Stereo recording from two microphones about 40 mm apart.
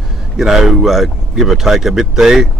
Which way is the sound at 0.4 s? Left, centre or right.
Centre.